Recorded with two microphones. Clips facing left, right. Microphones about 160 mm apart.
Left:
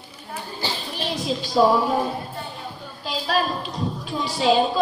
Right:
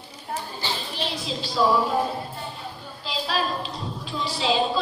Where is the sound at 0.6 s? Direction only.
45° left (ahead or behind).